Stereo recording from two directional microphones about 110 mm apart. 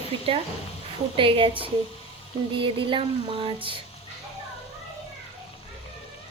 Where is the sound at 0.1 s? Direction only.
50° right (ahead or behind).